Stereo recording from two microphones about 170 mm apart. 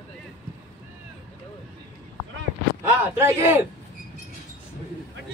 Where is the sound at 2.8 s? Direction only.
10° right (ahead or behind).